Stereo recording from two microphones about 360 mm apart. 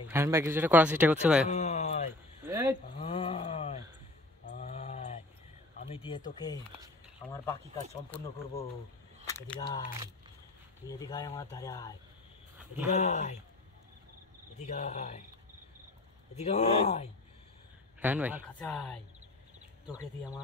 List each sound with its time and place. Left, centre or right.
0.1 s speech: centre
1.5 s a sound: centre
2.4 s a sound: centre
3.0 s a sound: centre
5.9 s speech: centre
9.2 s speech: centre
10.9 s speech: centre
12.9 s speech: centre
14.6 s speech: centre
16.3 s speech: centre
18.0 s speech: centre